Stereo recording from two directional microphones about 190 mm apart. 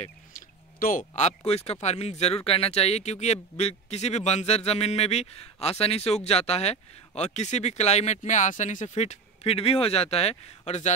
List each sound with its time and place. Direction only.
0.0 s speech: 45° left (ahead or behind)